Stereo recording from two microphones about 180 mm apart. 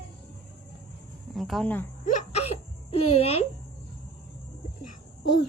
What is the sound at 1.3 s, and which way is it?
Speech, centre (ahead or behind).